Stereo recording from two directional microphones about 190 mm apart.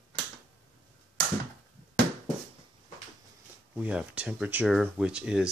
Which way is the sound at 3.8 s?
5° right (ahead or behind).